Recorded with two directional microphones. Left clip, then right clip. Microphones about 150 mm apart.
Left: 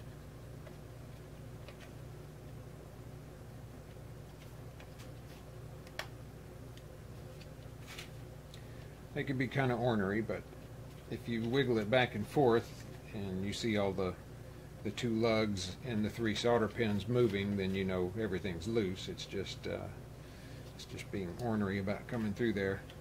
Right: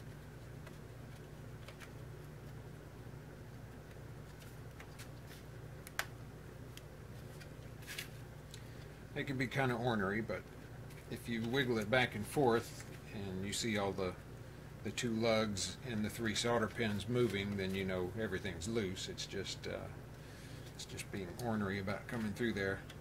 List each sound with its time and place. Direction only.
9.1 s speech: 35° left (ahead or behind)
20.9 s speech: 35° left (ahead or behind)